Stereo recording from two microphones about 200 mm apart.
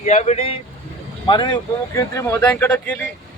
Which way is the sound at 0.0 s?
35° left (ahead or behind).